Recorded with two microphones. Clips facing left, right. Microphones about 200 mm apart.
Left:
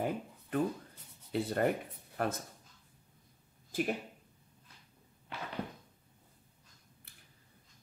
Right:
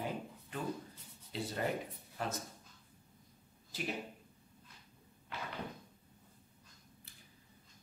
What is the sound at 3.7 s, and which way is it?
Speech, 50° left (ahead or behind).